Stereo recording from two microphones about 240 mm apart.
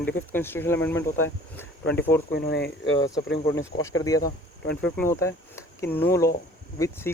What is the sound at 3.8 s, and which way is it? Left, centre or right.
Speech, centre.